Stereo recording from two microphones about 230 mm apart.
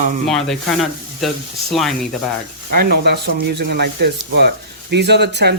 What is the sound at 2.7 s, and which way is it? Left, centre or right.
Speech, right.